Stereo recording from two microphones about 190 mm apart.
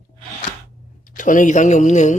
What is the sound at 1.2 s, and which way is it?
Speech, 45° left (ahead or behind).